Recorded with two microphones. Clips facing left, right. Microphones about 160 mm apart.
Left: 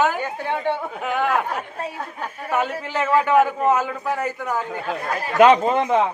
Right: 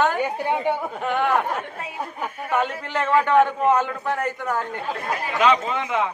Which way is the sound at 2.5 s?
5° left (ahead or behind).